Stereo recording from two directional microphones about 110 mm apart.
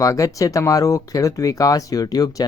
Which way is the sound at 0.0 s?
30° left (ahead or behind).